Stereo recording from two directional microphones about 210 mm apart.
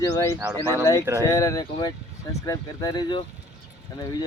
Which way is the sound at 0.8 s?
15° left (ahead or behind).